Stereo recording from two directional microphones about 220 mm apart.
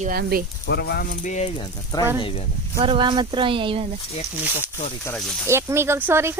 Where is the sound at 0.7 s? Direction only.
45° left (ahead or behind).